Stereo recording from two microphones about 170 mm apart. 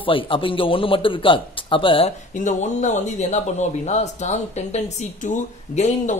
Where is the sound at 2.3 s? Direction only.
45° left (ahead or behind).